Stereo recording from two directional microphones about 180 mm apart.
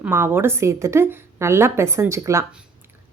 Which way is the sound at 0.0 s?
10° right (ahead or behind).